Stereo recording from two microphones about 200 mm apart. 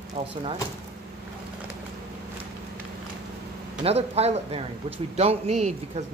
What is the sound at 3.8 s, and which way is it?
Speech, 30° right (ahead or behind).